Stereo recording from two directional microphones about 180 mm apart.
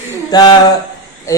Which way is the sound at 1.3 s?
15° left (ahead or behind).